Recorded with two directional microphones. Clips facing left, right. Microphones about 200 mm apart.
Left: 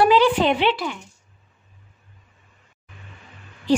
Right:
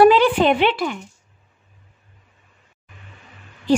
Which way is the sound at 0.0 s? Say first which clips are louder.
Right 3 dB; 55° right (ahead or behind).